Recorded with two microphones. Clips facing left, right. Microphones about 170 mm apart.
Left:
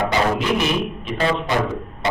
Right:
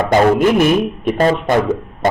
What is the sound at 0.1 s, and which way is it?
A man's voice, 50° right (ahead or behind).